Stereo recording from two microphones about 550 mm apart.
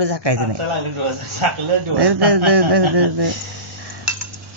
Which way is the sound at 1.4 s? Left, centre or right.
Right.